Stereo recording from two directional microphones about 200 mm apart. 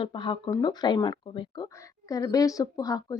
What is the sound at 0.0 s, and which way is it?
Speech, 25° left (ahead or behind).